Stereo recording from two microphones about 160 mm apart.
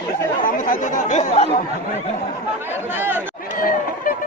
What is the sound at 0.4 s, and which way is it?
Speech, 60° left (ahead or behind).